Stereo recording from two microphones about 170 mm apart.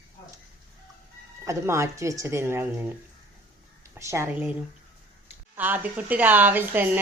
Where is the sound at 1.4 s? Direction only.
15° right (ahead or behind).